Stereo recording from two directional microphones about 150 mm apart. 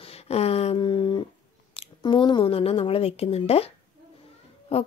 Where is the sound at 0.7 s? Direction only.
30° left (ahead or behind).